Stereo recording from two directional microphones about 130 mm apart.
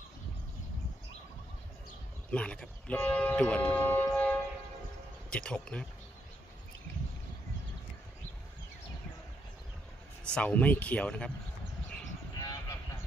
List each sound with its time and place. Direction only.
2.3 s speech: 10° left (ahead or behind)
10.2 s speech: 10° left (ahead or behind)
12.4 s vehicle: 30° left (ahead or behind)